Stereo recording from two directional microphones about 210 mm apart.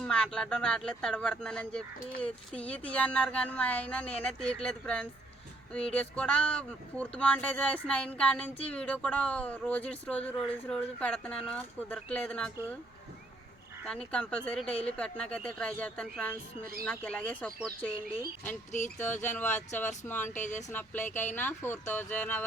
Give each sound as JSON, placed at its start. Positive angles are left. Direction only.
{"t": 0.0, "sound": "speech", "side_deg": 5}
{"t": 13.8, "sound": "speech", "side_deg": 5}
{"t": 18.7, "sound": "a sound", "side_deg": 35}
{"t": 19.4, "sound": "speech", "side_deg": 10}
{"t": 20.4, "sound": "a sound", "side_deg": 35}
{"t": 20.7, "sound": "speech", "side_deg": 10}